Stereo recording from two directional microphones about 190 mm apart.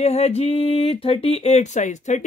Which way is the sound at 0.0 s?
35° left (ahead or behind).